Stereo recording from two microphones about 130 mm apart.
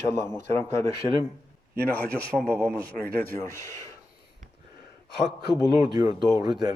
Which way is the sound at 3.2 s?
15° left (ahead or behind).